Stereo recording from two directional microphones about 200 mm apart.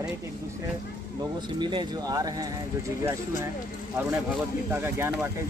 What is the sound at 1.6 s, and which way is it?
Speech, 25° right (ahead or behind).